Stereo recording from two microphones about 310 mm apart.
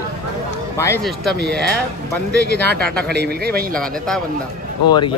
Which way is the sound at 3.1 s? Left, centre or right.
Right.